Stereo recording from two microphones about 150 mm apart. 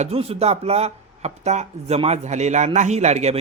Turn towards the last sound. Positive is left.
turn(degrees=-50)  # may be behind; listen again after turning